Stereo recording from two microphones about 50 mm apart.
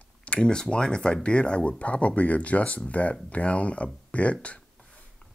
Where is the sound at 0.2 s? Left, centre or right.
Left.